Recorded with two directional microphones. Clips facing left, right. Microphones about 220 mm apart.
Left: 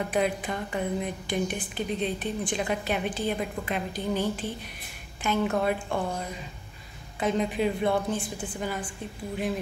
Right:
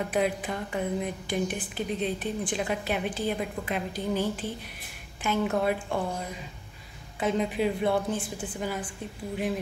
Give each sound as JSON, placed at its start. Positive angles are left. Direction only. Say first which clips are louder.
{"t": 0.0, "sound": "a woman's voice", "louder": "even", "side_deg": -5}
{"t": 7.2, "sound": "a woman's voice", "louder": "even", "side_deg": -5}